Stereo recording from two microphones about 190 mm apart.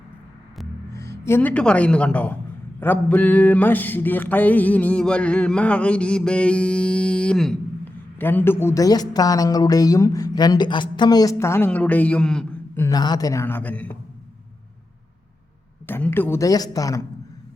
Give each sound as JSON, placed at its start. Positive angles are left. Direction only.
{"t": 1.2, "sound": "mantra", "side_deg": 10}
{"t": 8.2, "sound": "a woman's voice", "side_deg": 10}
{"t": 12.8, "sound": "mantra", "side_deg": 20}
{"t": 15.9, "sound": "mantra", "side_deg": 10}